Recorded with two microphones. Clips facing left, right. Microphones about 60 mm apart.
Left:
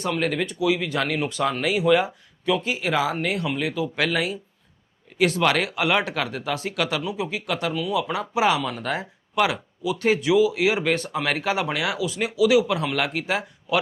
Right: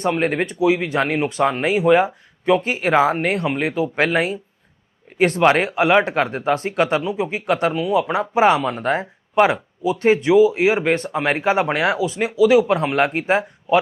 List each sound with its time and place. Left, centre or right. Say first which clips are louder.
0.0 s speech: right 5 dB; right